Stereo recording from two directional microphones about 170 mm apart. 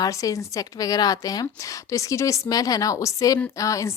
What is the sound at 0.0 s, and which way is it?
Speech, 20° left (ahead or behind).